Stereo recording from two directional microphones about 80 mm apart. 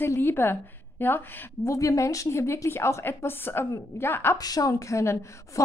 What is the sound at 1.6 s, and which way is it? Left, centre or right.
A woman's voice, left.